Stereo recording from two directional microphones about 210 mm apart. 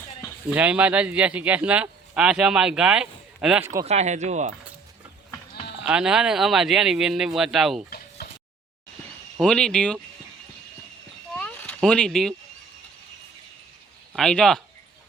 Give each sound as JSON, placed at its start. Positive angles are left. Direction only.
{"t": 0.5, "sound": "speech", "side_deg": -5}
{"t": 3.8, "sound": "speech", "side_deg": -30}
{"t": 5.8, "sound": "speech", "side_deg": -5}
{"t": 7.9, "sound": "a sound", "side_deg": 45}
{"t": 9.4, "sound": "speech", "side_deg": 5}
{"t": 11.3, "sound": "a sound", "side_deg": 5}
{"t": 14.1, "sound": "speech", "side_deg": 0}